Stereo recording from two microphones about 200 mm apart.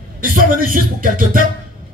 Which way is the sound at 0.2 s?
45° right (ahead or behind).